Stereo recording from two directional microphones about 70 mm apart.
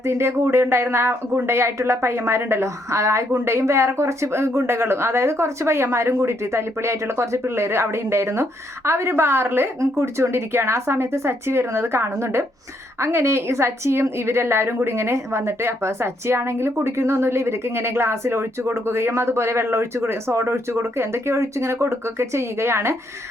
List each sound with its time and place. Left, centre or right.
0.0 s a woman's voice: right